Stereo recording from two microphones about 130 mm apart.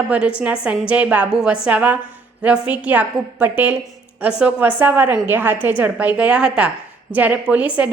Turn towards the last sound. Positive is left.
turn(degrees=-10)  # may be behind; listen again after turning